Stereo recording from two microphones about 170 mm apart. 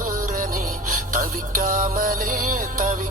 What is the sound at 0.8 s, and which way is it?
Music, 55° right (ahead or behind).